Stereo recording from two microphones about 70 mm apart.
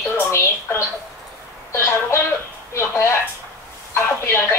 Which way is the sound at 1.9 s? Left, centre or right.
Left.